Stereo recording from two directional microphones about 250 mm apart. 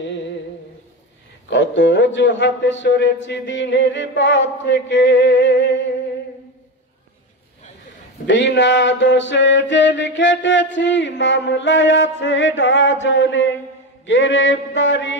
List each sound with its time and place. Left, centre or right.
1.5 s mantra: left
8.3 s mantra: left